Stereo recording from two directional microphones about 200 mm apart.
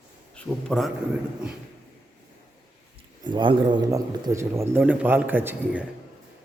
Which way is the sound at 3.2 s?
25° right (ahead or behind).